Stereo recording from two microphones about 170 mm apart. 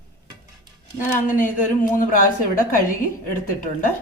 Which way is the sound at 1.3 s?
50° left (ahead or behind).